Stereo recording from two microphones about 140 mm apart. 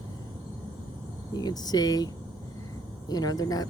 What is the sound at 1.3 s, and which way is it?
Speech, 30° left (ahead or behind).